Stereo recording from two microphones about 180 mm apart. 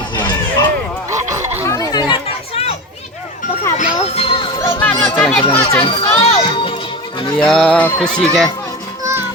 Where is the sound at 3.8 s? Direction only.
35° left (ahead or behind).